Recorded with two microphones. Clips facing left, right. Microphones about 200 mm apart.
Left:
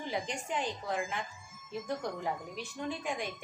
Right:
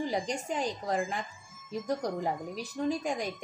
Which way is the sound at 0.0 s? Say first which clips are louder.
Right 5 dB; 40° right (ahead or behind).